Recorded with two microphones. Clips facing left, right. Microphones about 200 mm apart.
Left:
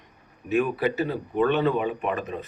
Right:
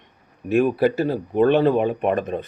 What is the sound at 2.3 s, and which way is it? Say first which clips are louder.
Speech: right 6 dB; 50° right (ahead or behind).